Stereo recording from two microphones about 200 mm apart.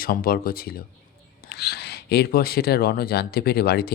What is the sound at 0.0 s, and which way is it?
Speech, 45° left (ahead or behind).